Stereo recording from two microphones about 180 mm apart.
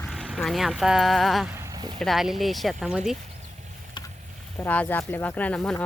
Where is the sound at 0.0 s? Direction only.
Centre (ahead or behind).